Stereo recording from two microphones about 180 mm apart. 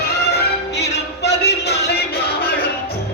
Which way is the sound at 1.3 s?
70° left (ahead or behind).